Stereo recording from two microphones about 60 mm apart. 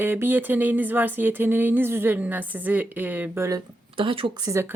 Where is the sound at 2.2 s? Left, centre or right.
Right.